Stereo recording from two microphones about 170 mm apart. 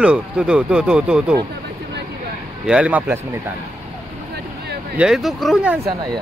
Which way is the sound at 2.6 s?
5° right (ahead or behind).